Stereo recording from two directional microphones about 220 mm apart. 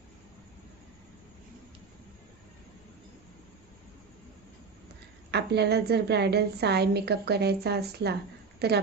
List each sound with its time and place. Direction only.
5.3 s a woman's voice: 50° right (ahead or behind)